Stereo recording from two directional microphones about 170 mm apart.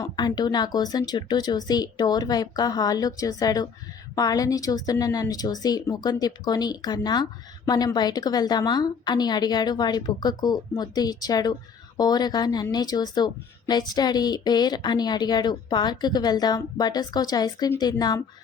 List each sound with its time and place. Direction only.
0.0 s a woman's voice: 25° left (ahead or behind)